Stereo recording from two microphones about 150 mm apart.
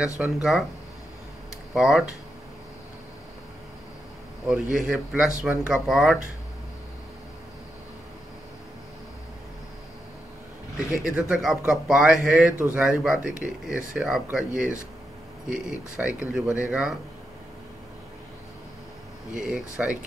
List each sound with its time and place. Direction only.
0.2 s speech: centre (ahead or behind)
1.7 s speech: centre (ahead or behind)
4.5 s speech: 5° right (ahead or behind)
11.1 s speech: 5° right (ahead or behind)
19.4 s speech: 5° right (ahead or behind)